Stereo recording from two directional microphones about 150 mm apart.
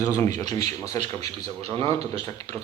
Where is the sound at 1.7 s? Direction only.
40° right (ahead or behind).